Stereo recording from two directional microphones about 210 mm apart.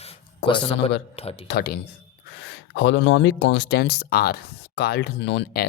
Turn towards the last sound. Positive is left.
turn(degrees=55)  # may be behind; listen again after turning